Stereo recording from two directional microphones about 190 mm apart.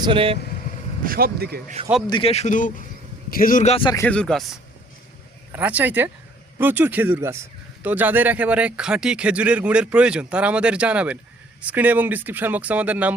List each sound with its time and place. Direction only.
0.0 s speech: 30° right (ahead or behind)
1.0 s speech: 50° right (ahead or behind)
2.0 s speech: 25° left (ahead or behind)
3.9 s speech: 10° left (ahead or behind)
5.5 s speech: 10° right (ahead or behind)